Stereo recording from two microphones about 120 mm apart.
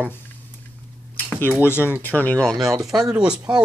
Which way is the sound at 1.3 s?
15° left (ahead or behind).